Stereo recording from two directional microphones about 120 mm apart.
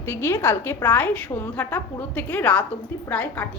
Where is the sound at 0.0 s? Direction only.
20° left (ahead or behind).